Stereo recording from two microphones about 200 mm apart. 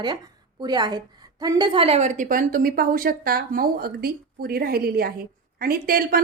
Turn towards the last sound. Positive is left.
turn(degrees=-45)  # may be behind; listen again after turning